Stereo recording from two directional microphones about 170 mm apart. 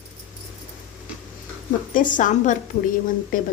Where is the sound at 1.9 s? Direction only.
50° left (ahead or behind).